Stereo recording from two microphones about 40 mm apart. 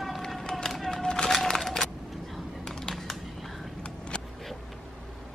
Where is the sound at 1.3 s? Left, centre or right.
Centre.